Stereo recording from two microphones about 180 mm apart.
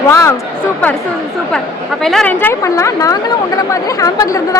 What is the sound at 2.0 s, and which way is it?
Speech, 5° left (ahead or behind).